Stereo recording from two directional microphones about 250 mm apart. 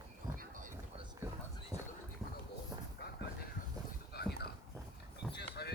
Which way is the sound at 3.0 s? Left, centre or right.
Left.